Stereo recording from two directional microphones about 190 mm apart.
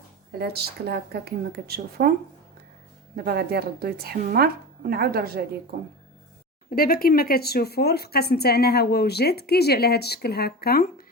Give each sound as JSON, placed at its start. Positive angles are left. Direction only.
{"t": 0.3, "sound": "a woman's voice", "side_deg": -55}
{"t": 3.2, "sound": "a woman's voice", "side_deg": -55}
{"t": 6.7, "sound": "speech", "side_deg": 50}